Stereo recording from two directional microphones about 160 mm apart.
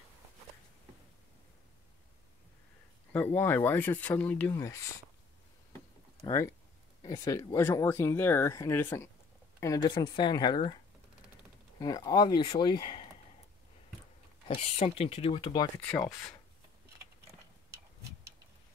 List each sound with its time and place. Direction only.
3.1 s speech: 10° left (ahead or behind)
6.2 s speech: 15° left (ahead or behind)
11.8 s speech: 20° left (ahead or behind)
14.5 s speech: 40° left (ahead or behind)
15.8 s speech: 5° left (ahead or behind)